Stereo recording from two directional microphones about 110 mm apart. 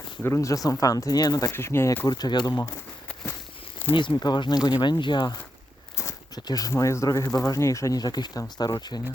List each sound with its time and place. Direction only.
0.2 s speech: 20° left (ahead or behind)
1.5 s speech: 25° left (ahead or behind)
2.0 s speech: 40° left (ahead or behind)
3.9 s speech: 45° left (ahead or behind)
6.0 s speech: 30° left (ahead or behind)